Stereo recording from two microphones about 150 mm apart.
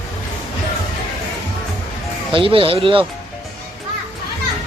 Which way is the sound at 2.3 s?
35° right (ahead or behind).